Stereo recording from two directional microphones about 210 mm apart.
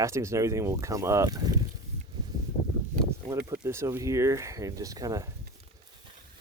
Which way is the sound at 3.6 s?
10° right (ahead or behind).